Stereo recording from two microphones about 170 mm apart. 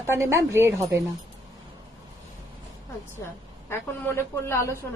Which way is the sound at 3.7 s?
15° left (ahead or behind).